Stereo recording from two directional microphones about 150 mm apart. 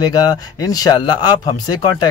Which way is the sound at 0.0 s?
25° left (ahead or behind).